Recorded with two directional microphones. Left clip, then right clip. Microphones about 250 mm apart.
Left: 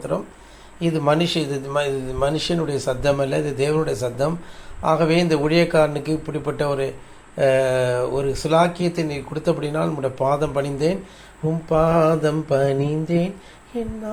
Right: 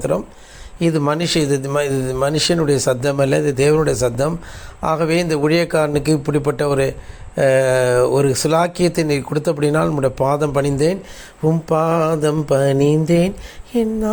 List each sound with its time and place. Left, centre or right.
0.1 s a man's voice: right